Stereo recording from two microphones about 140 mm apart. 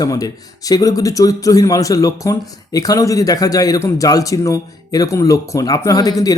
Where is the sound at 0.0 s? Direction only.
25° left (ahead or behind).